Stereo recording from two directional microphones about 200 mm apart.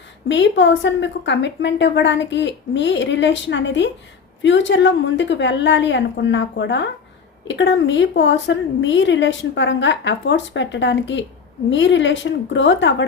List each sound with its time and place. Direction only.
0.3 s a woman's voice: 65° left (ahead or behind)